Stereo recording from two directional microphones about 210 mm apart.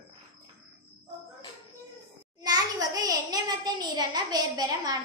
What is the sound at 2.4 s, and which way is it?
A child's voice, 20° right (ahead or behind).